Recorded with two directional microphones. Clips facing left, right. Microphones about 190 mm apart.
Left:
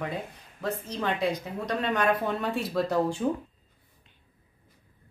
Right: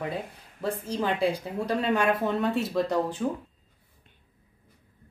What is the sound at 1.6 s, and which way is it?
Speech, 5° right (ahead or behind).